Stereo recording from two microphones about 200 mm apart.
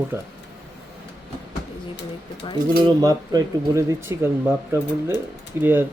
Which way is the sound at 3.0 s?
20° right (ahead or behind).